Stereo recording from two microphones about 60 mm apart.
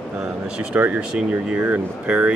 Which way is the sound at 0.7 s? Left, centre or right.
Right.